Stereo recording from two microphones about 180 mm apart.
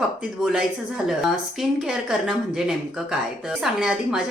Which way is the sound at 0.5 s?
Centre (ahead or behind).